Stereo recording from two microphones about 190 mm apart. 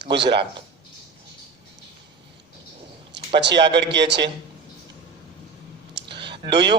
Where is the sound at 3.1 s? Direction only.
65° right (ahead or behind).